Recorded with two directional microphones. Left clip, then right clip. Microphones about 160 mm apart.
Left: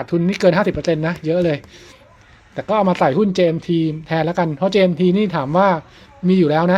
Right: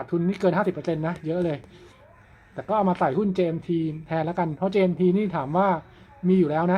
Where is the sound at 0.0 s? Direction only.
30° left (ahead or behind).